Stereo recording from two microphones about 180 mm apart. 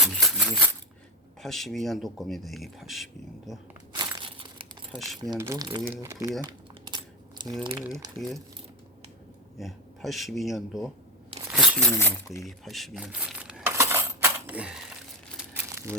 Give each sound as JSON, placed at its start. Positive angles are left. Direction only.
{"t": 0.0, "sound": "coin", "side_deg": 0}
{"t": 1.4, "sound": "speech", "side_deg": 0}
{"t": 3.9, "sound": "crumpling", "side_deg": -25}
{"t": 4.9, "sound": "speech", "side_deg": 0}
{"t": 5.2, "sound": "speech", "side_deg": -20}
{"t": 7.9, "sound": "speech", "side_deg": -20}
{"t": 9.6, "sound": "speech", "side_deg": 0}
{"t": 11.5, "sound": "a sound", "side_deg": 0}
{"t": 11.9, "sound": "speech", "side_deg": 15}
{"t": 12.5, "sound": "coin", "side_deg": 0}
{"t": 15.4, "sound": "crumpling", "side_deg": -15}